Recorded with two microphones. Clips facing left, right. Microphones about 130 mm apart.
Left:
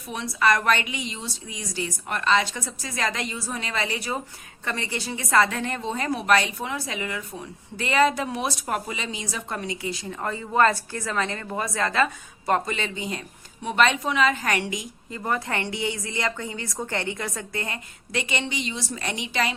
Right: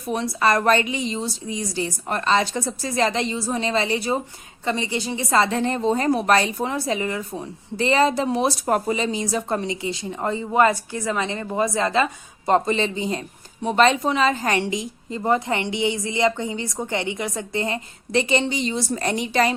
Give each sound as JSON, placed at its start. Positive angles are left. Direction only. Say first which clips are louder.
{"t": 0.1, "sound": "a woman's voice", "louder": "right 3 dB", "side_deg": -35}